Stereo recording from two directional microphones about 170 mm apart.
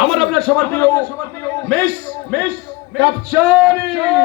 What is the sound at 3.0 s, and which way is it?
A man's voice, 10° right (ahead or behind).